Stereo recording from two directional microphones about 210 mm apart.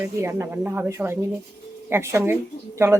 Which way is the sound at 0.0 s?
10° right (ahead or behind).